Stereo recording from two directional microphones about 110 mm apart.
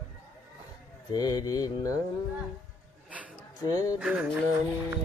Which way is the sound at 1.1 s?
35° left (ahead or behind).